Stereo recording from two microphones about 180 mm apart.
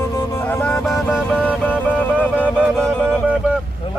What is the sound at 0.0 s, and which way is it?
Music, 15° left (ahead or behind).